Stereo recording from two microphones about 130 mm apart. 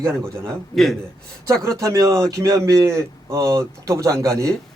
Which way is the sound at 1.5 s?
25° right (ahead or behind).